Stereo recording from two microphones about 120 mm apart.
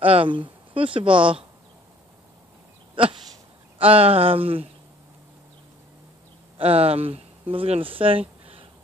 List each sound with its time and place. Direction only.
0.0 s speech: 50° right (ahead or behind)
3.0 s a sound: 45° right (ahead or behind)
3.7 s speech: 50° right (ahead or behind)
6.6 s speech: 55° right (ahead or behind)